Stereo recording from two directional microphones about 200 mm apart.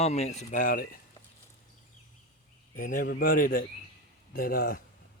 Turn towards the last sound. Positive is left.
turn(degrees=45)  # may be behind; listen again after turning